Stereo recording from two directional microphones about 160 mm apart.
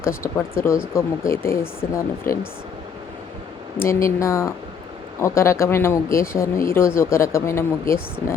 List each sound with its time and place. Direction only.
0.6 s speech: 15° left (ahead or behind)
3.8 s speech: 15° left (ahead or behind)